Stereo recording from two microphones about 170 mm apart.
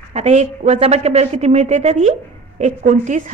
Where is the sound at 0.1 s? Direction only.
40° right (ahead or behind).